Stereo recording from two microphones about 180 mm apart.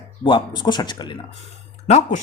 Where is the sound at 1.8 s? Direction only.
40° left (ahead or behind).